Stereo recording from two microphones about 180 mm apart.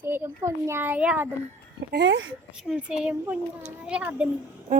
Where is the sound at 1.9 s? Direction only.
85° right.